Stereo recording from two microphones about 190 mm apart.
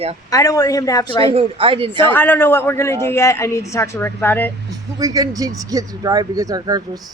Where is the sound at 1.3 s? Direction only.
30° right (ahead or behind).